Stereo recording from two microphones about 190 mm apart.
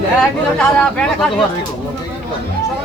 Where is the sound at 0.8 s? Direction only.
5° left (ahead or behind).